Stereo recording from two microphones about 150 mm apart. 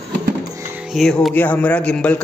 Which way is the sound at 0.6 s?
15° right (ahead or behind).